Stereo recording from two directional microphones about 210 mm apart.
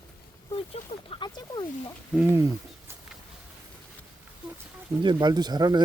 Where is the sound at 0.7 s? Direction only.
25° left (ahead or behind).